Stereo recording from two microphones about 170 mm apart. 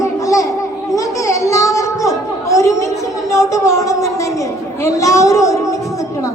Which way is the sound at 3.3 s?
20° left (ahead or behind).